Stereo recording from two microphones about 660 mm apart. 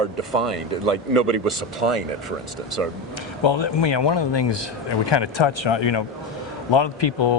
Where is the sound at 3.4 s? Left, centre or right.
Left.